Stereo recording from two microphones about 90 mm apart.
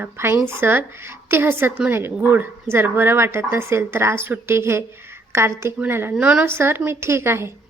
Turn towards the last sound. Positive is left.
turn(degrees=-30)  # may be behind; listen again after turning